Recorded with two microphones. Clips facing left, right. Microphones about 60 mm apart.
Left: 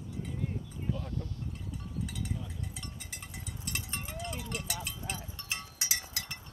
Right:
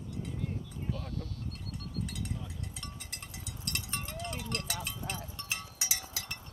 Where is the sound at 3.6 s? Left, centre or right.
Centre.